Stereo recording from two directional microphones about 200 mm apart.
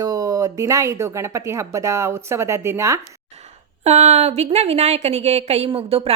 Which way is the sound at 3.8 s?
35° right (ahead or behind).